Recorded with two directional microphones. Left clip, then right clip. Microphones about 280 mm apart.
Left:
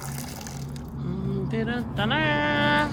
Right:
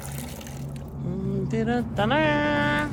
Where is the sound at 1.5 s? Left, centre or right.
Centre.